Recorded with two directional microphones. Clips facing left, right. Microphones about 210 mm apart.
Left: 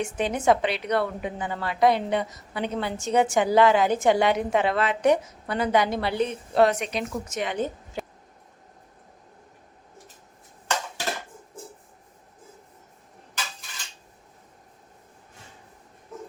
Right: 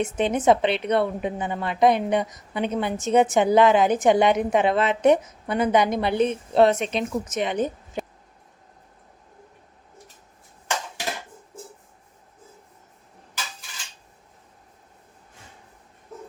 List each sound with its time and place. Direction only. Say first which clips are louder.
0.0 s a woman's voice: right 3 dB; 20° right (ahead or behind)